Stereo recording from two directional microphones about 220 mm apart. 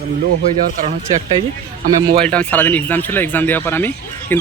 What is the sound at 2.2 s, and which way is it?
Speech, 5° left (ahead or behind).